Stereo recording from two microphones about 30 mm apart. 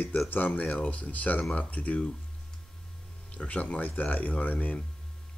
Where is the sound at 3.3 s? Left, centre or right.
Left.